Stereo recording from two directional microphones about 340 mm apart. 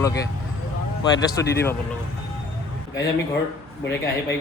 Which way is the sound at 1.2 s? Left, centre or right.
Centre.